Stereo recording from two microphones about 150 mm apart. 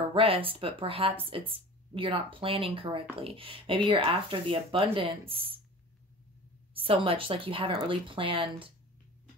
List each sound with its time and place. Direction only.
0.1 s speech: 40° right (ahead or behind)
6.7 s speech: 35° right (ahead or behind)